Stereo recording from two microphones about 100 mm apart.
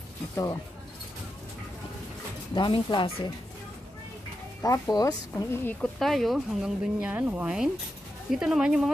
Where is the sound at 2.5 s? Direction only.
50° left (ahead or behind).